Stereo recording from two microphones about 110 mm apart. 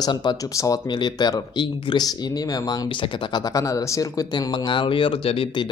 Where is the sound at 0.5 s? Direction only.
30° left (ahead or behind).